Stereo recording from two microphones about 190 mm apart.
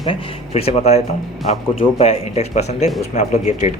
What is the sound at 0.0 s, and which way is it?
Speech, 30° left (ahead or behind).